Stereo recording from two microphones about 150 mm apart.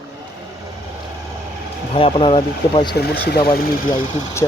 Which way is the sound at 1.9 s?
35° left (ahead or behind).